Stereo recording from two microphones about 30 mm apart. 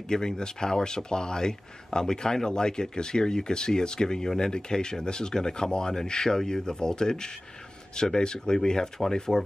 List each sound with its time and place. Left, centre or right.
0.1 s speech: left